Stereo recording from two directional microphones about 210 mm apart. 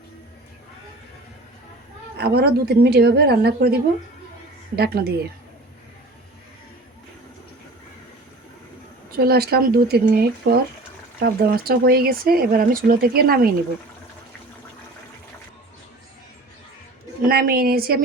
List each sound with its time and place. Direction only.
2.1 s speech: 50° right (ahead or behind)
4.8 s speech: 50° right (ahead or behind)
9.1 s speech: 50° right (ahead or behind)
17.2 s speech: 45° right (ahead or behind)